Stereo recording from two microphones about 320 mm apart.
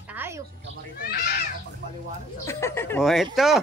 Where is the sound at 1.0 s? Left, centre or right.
Left.